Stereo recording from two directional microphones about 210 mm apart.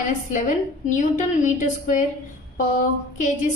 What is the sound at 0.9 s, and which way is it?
A woman's voice, 35° left (ahead or behind).